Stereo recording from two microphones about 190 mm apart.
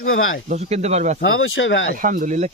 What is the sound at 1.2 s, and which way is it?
Speech, 90° left.